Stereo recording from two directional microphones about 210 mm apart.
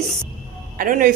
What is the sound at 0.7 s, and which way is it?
Speech, 40° right (ahead or behind).